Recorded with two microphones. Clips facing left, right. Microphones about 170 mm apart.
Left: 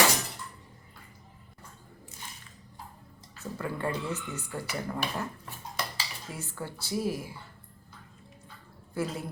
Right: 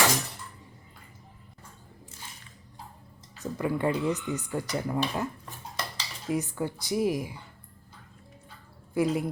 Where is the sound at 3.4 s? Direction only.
15° right (ahead or behind).